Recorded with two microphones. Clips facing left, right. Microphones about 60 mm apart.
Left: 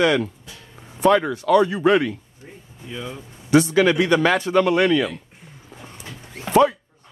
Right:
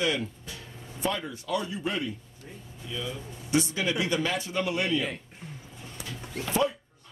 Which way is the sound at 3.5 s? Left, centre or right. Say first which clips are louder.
Left 11 dB; left.